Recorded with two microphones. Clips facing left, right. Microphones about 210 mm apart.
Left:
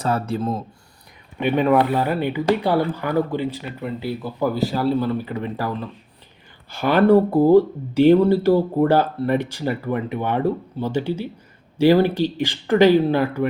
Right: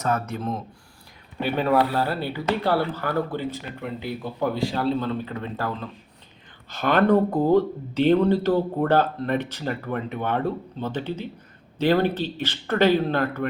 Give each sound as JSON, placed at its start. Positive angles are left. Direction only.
{"t": 0.0, "sound": "speech", "side_deg": 30}
{"t": 1.5, "sound": "speech", "side_deg": 0}
{"t": 1.9, "sound": "speech", "side_deg": 15}